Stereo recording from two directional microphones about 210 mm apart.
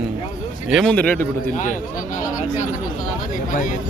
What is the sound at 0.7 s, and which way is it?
Speech, 5° left (ahead or behind).